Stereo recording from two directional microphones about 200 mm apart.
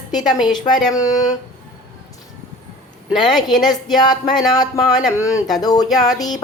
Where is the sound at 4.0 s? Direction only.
20° left (ahead or behind).